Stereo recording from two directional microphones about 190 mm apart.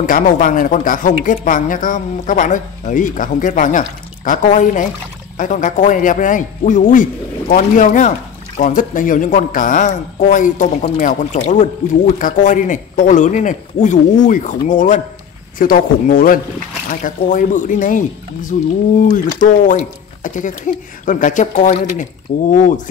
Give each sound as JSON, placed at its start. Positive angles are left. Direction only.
{"t": 0.0, "sound": "a man's voice", "side_deg": 45}